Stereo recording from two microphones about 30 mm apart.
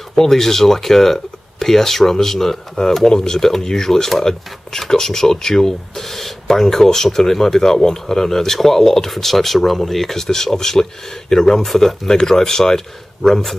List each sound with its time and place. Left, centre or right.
0.1 s speech: centre
11.6 s speech: centre